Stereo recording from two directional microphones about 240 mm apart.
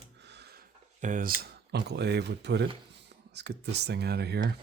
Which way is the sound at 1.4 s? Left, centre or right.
Right.